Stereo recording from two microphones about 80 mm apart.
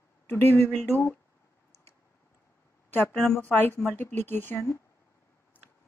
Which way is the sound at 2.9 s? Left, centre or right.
Left.